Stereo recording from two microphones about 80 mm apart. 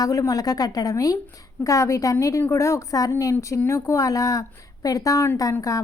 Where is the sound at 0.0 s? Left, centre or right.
Left.